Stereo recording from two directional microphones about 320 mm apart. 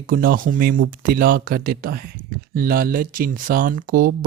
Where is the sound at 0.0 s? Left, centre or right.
Right.